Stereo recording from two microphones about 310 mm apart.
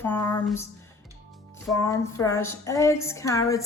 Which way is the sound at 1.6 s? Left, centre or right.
Centre.